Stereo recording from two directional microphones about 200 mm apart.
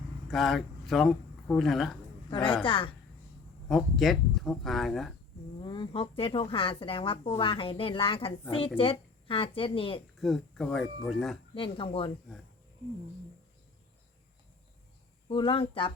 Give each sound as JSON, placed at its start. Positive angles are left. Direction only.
{"t": 0.3, "sound": "speech", "side_deg": 0}
{"t": 2.3, "sound": "a woman's voice", "side_deg": 25}
{"t": 3.7, "sound": "speech", "side_deg": 0}
{"t": 5.5, "sound": "a woman's voice", "side_deg": 20}
{"t": 10.2, "sound": "speech", "side_deg": 0}
{"t": 11.5, "sound": "a woman's voice", "side_deg": 25}
{"t": 15.3, "sound": "a woman's voice", "side_deg": 25}